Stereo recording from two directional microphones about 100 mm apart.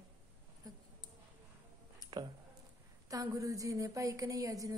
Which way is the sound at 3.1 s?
35° right (ahead or behind).